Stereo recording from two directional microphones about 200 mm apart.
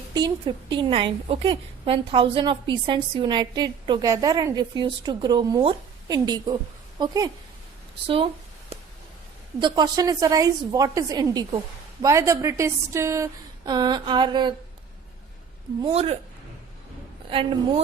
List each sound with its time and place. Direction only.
0.1 s a woman's voice: 20° right (ahead or behind)
9.6 s a woman's voice: 20° right (ahead or behind)
15.8 s a woman's voice: 30° right (ahead or behind)